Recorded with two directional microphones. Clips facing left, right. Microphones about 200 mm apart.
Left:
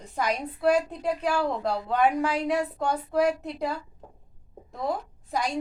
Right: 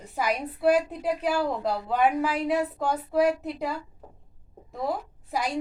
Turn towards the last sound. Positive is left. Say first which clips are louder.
# even
turn(degrees=-5)  # may be behind; listen again after turning